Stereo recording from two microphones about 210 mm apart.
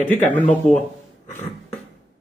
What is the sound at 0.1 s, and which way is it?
Speech, 35° left (ahead or behind).